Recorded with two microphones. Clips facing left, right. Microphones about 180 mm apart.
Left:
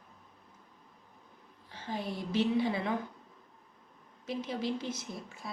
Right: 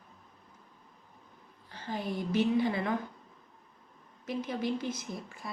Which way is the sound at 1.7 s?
25° left (ahead or behind).